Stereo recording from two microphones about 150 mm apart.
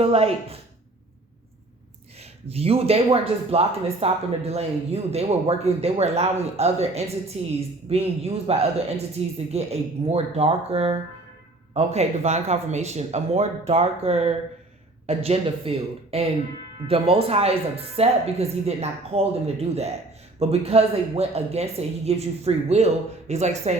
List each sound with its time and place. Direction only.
0.0 s speech: 40° right (ahead or behind)
2.1 s speech: 40° right (ahead or behind)